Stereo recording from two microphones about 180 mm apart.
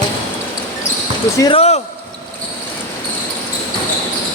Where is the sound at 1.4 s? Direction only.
30° left (ahead or behind).